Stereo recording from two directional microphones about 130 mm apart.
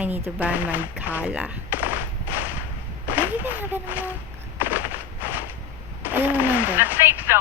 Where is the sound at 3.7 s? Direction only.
15° right (ahead or behind).